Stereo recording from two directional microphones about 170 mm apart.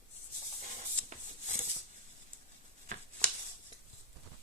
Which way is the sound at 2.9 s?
45° right (ahead or behind).